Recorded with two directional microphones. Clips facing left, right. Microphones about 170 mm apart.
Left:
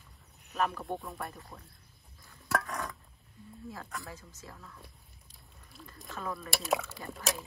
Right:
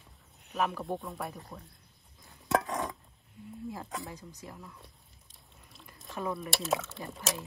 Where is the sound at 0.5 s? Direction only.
Centre (ahead or behind).